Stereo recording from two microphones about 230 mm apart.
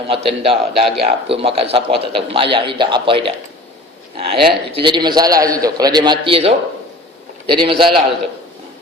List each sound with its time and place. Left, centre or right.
0.1 s a man's voice: right